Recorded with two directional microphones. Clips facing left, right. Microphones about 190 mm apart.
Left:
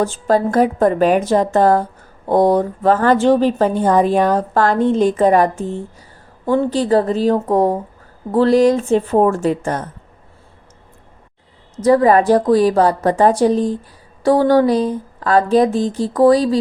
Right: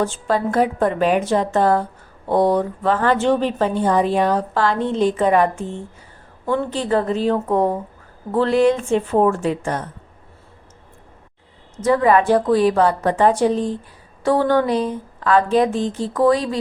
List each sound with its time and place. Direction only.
0.0 s a woman's voice: 40° left (ahead or behind)
11.8 s speech: 35° left (ahead or behind)